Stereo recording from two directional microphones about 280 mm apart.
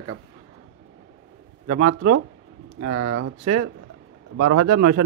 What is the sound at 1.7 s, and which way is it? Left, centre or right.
Speech, right.